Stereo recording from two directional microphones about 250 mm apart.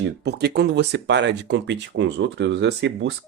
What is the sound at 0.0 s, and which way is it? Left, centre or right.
Speech, right.